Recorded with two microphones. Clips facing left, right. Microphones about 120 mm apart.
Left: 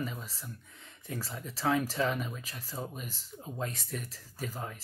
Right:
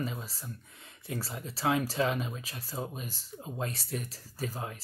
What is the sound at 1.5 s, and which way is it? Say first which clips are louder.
Speech: right 1 dB; 15° right (ahead or behind).